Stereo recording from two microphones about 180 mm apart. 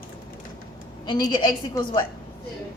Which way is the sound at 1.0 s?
20° left (ahead or behind).